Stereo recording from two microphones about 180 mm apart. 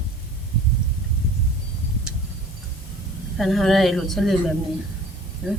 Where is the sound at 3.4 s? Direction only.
Centre (ahead or behind).